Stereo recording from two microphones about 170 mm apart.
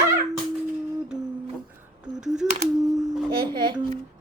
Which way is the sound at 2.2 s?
5° right (ahead or behind).